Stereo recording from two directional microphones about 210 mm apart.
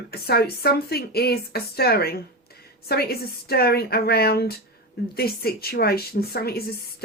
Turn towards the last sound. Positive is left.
turn(degrees=45)  # may be behind; listen again after turning